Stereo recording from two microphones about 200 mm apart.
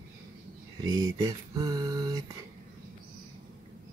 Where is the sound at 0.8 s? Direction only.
20° right (ahead or behind).